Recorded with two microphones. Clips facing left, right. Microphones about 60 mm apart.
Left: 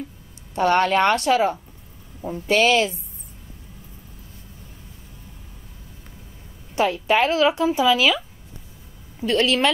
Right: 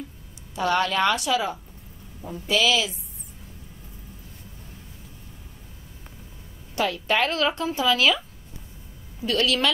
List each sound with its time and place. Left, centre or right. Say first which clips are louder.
0.6 s speech: left 5 dB; left
6.7 s speech: left 4 dB; left
9.2 s a woman's voice: left 4 dB; left